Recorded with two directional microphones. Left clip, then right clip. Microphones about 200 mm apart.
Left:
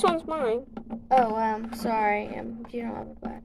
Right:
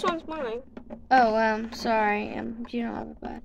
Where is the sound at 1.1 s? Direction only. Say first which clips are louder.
Right 2 dB; 15° right (ahead or behind).